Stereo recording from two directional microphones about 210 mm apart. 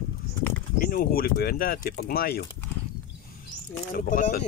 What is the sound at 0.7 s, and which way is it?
Speech, 45° left (ahead or behind).